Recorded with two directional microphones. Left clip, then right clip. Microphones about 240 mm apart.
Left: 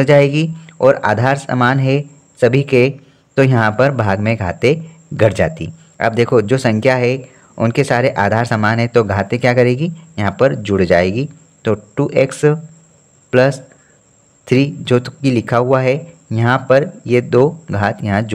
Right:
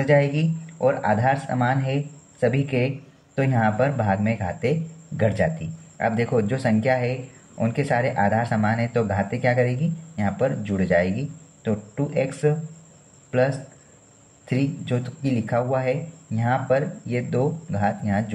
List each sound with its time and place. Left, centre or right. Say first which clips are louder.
0.0 s speech: left 9 dB; left
14.4 s speech: left 12 dB; left